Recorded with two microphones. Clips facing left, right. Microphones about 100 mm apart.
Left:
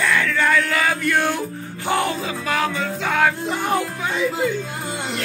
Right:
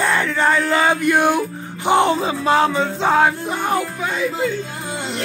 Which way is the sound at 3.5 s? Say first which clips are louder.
Right 1 dB; 15° right (ahead or behind).